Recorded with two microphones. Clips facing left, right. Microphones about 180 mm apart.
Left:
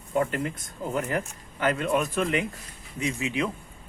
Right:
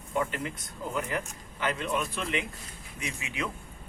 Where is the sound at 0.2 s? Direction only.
45° left (ahead or behind).